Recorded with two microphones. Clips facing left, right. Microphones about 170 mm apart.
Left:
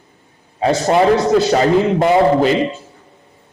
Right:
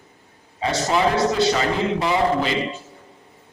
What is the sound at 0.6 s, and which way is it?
A man's voice, 50° left (ahead or behind).